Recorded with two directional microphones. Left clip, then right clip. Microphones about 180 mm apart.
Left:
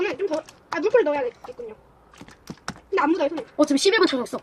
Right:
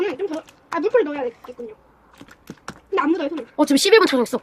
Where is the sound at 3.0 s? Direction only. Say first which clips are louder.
Even; 25° right (ahead or behind).